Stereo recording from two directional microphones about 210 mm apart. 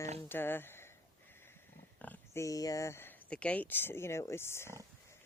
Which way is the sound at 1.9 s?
10° left (ahead or behind).